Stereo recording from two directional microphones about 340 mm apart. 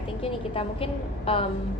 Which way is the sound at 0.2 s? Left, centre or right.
Centre.